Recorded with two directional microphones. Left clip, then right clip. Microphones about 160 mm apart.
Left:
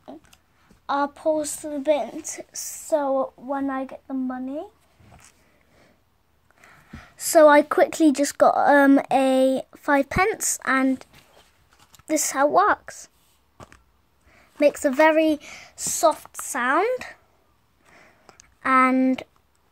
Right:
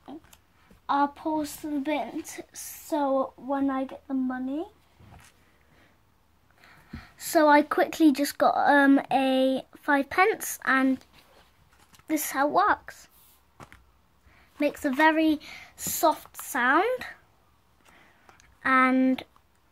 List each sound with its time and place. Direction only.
0.8 s a woman's voice: 50° left (ahead or behind)
6.6 s a woman's voice: 40° left (ahead or behind)
12.1 s a woman's voice: 35° left (ahead or behind)
14.3 s a woman's voice: 40° left (ahead or behind)
17.9 s a sound: 30° left (ahead or behind)
18.9 s speech: 25° left (ahead or behind)